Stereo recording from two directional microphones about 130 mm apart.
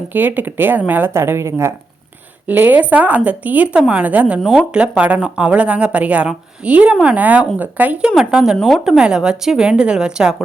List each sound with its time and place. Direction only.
0.1 s a woman's voice: 15° right (ahead or behind)